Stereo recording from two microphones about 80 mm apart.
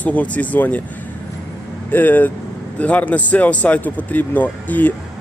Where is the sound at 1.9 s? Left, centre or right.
Left.